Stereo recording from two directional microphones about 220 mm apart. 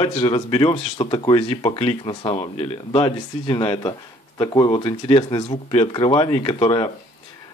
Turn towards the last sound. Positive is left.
turn(degrees=20)  # may be behind; listen again after turning